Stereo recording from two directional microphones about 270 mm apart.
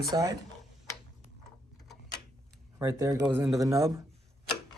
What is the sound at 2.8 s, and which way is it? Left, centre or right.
Speech, centre.